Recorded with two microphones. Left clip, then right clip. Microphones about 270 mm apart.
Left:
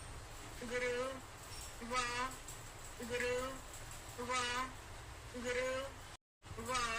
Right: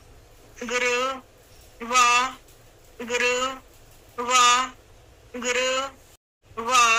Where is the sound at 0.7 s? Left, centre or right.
Right.